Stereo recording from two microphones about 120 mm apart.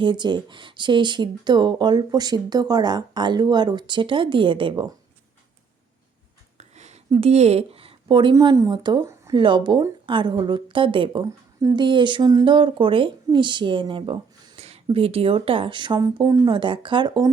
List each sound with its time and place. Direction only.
0.0 s speech: 40° right (ahead or behind)
6.6 s a sound: 70° right (ahead or behind)
7.1 s speech: 60° right (ahead or behind)
8.0 s a woman's voice: 40° right (ahead or behind)
12.5 s a woman's voice: 45° right (ahead or behind)
16.2 s speech: 25° right (ahead or behind)
16.5 s speech: 45° right (ahead or behind)